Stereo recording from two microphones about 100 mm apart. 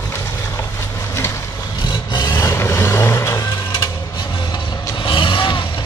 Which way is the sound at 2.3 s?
25° left (ahead or behind).